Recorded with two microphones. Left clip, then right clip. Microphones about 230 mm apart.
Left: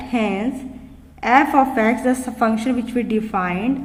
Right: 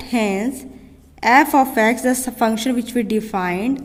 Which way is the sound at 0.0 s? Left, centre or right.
Right.